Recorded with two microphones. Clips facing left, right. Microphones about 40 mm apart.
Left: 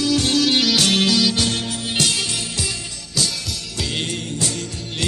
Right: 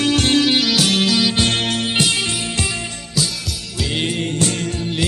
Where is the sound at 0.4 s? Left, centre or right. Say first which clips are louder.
Right 1 dB; centre.